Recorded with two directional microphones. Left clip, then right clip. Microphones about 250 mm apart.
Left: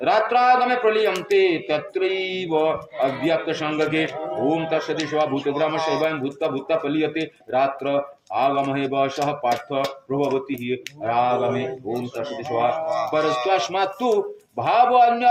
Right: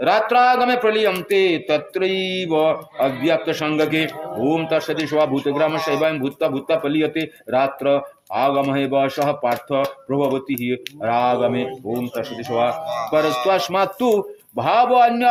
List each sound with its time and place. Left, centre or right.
0.0 s speech: right
13.1 s speech: right